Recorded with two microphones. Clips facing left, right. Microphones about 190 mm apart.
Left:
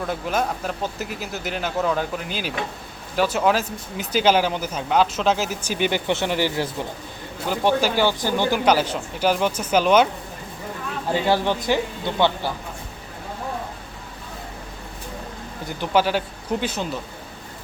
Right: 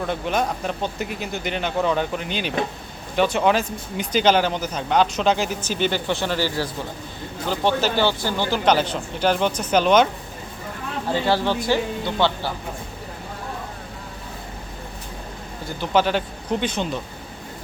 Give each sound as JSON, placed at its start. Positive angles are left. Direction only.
{"t": 0.0, "sound": "speech", "side_deg": 5}
{"t": 11.1, "sound": "speech", "side_deg": 15}
{"t": 15.8, "sound": "speech", "side_deg": 10}